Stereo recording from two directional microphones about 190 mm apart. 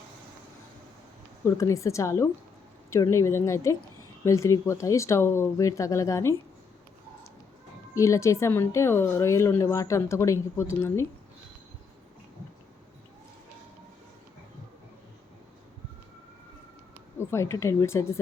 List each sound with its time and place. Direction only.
1.5 s a woman's voice: 15° left (ahead or behind)
7.9 s a woman's voice: 15° left (ahead or behind)
17.2 s a woman's voice: 15° left (ahead or behind)